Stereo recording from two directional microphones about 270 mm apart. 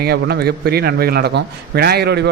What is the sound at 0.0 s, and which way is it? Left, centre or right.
A man's voice, right.